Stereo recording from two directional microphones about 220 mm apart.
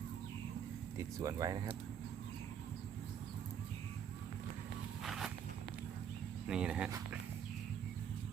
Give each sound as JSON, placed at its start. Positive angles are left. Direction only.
{"t": 1.2, "sound": "speech", "side_deg": -15}
{"t": 5.0, "sound": "walk", "side_deg": 0}
{"t": 6.5, "sound": "speech", "side_deg": -5}